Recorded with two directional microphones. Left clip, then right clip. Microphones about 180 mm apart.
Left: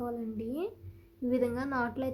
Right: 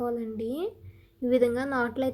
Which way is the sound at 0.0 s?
20° right (ahead or behind).